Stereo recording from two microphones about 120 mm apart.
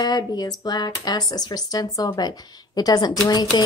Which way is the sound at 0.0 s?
35° left (ahead or behind).